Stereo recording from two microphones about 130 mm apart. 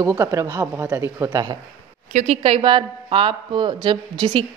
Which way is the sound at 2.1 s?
60° right (ahead or behind).